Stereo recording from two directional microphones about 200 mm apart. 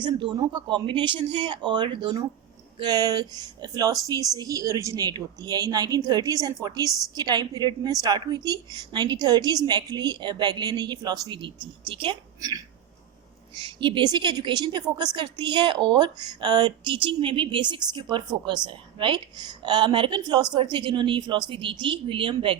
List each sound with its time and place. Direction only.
0.3 s a woman's voice: 20° right (ahead or behind)